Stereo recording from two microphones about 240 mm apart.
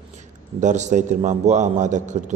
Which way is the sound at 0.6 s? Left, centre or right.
Right.